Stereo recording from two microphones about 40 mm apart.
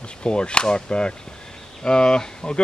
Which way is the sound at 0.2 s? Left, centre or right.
Left.